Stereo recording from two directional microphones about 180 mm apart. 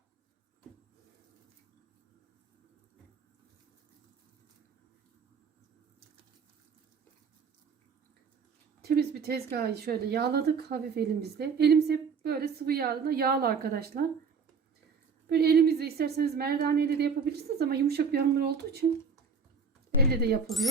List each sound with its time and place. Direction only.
8.8 s a woman's voice: 60° right (ahead or behind)
15.3 s a woman's voice: 60° right (ahead or behind)
20.0 s a woman's voice: 60° right (ahead or behind)